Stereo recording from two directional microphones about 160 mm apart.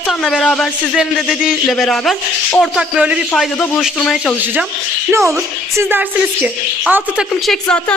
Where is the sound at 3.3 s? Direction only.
5° left (ahead or behind).